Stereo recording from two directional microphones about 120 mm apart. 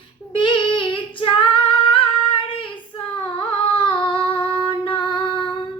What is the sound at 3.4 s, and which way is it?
Female singing, 50° left (ahead or behind).